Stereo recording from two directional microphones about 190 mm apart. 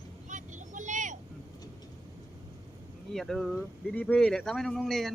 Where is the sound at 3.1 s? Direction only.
Centre (ahead or behind).